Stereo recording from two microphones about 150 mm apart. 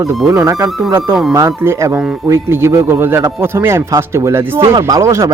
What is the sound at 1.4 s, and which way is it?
Speech, 20° right (ahead or behind).